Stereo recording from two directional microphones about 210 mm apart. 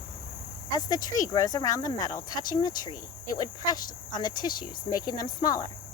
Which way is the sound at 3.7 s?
20° left (ahead or behind).